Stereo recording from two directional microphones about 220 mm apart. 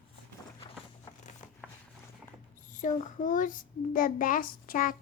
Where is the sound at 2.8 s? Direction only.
35° left (ahead or behind).